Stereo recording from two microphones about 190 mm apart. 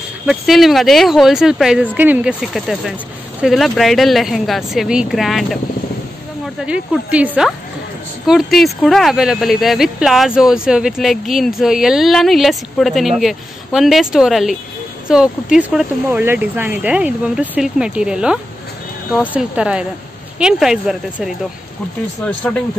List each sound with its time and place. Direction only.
0.3 s speech: centre (ahead or behind)
22.2 s speech: 10° left (ahead or behind)